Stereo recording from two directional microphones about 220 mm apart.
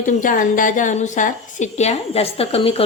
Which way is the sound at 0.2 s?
40° left (ahead or behind).